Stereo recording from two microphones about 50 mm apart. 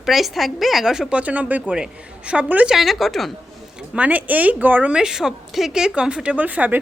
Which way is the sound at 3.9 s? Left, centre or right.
Right.